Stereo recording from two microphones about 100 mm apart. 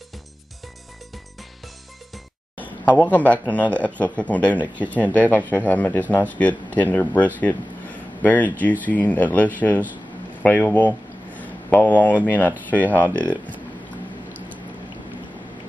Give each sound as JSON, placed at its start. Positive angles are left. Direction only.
{"t": 2.8, "sound": "a man's voice", "side_deg": 15}
{"t": 11.3, "sound": "a sound", "side_deg": 15}
{"t": 12.3, "sound": "a man's voice", "side_deg": 15}